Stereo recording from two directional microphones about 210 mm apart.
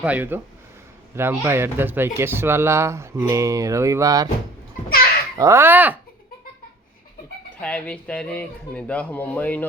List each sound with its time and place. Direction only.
0.0 s speech: 10° right (ahead or behind)
5.4 s speech: 10° right (ahead or behind)
7.6 s speech: 5° left (ahead or behind)